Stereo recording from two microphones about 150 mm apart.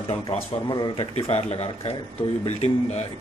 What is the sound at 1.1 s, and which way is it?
Speech, 45° left (ahead or behind).